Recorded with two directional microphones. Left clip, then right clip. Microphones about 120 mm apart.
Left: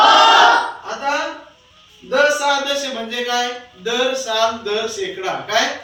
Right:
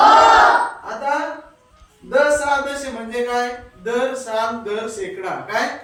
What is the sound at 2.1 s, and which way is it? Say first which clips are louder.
A man's voice: left 1 dB; 15° right (ahead or behind).